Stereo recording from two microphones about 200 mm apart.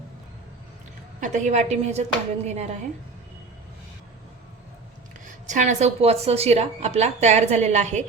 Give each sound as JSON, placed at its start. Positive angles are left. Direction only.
{"t": 1.2, "sound": "a woman's voice", "side_deg": -35}
{"t": 5.5, "sound": "a woman's voice", "side_deg": -35}